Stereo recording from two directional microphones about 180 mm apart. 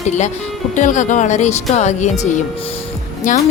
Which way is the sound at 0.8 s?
45° left (ahead or behind).